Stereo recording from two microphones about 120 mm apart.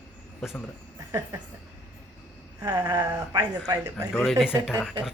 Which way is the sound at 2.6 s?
30° right (ahead or behind).